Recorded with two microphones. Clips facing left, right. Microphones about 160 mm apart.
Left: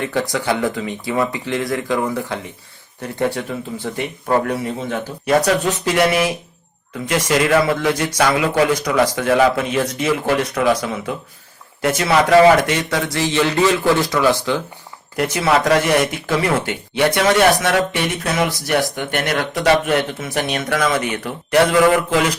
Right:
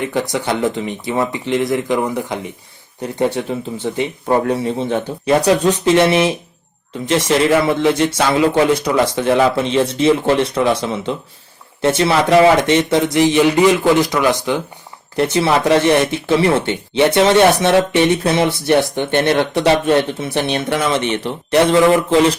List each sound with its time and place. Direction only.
0.0 s a man's voice: 20° right (ahead or behind)
15.1 s speech: 30° right (ahead or behind)